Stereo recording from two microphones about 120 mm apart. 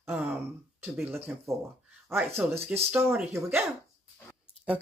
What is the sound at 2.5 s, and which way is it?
Speech, 60° right (ahead or behind).